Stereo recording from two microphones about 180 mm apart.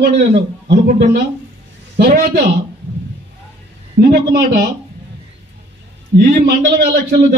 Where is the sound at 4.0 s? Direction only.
55° right (ahead or behind).